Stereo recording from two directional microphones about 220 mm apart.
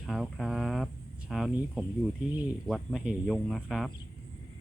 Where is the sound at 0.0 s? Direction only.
Centre (ahead or behind).